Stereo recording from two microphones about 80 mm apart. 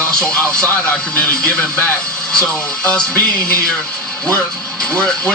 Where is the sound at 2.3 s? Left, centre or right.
Centre.